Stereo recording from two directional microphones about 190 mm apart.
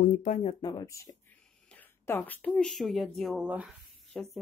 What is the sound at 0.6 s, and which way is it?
Speech, 20° left (ahead or behind).